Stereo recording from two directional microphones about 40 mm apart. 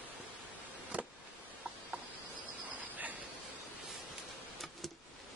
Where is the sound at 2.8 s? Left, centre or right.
Right.